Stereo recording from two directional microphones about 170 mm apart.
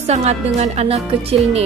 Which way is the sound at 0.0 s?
40° right (ahead or behind).